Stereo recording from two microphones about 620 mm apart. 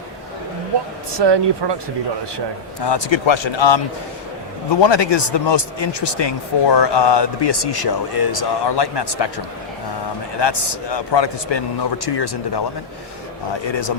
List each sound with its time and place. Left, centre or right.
1.1 s speech: right
2.8 s a man's voice: left
10.4 s a man's voice: left